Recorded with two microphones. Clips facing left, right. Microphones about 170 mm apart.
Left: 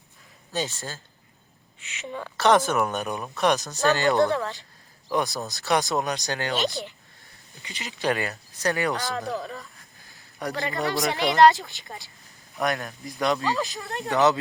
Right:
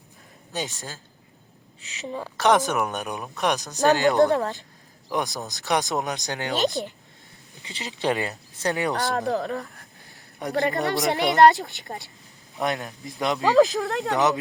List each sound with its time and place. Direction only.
0.5 s speech: 15° right (ahead or behind)
1.8 s a woman's voice: 35° right (ahead or behind)
2.4 s speech: 15° right (ahead or behind)
4.2 s speech: 40° right (ahead or behind)
5.1 s speech: 15° right (ahead or behind)
7.7 s speech: 30° right (ahead or behind)
9.1 s speech: 60° right (ahead or behind)
10.4 s speech: 20° right (ahead or behind)
11.1 s speech: centre (ahead or behind)
12.5 s speech: 20° right (ahead or behind)
13.5 s speech: 85° right
14.1 s speech: 20° right (ahead or behind)